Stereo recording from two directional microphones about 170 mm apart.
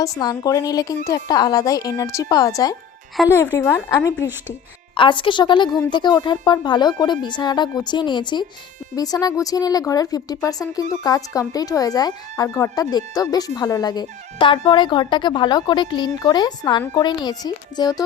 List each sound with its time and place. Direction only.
0.0 s speech: 20° left (ahead or behind)
4.9 s speech: 30° left (ahead or behind)